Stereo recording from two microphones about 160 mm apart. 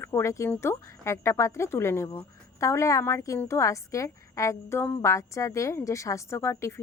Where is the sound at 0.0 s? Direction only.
15° left (ahead or behind).